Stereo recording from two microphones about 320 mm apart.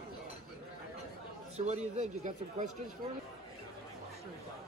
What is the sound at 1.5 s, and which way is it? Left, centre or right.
A man's voice, right.